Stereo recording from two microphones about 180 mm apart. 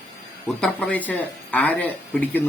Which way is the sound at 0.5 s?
5° left (ahead or behind).